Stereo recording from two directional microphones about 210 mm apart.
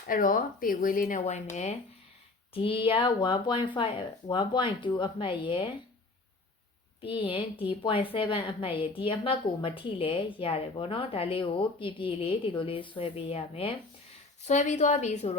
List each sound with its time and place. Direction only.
0.1 s speech: 40° left (ahead or behind)
2.5 s a woman's voice: 25° left (ahead or behind)
7.0 s a woman's voice: 25° left (ahead or behind)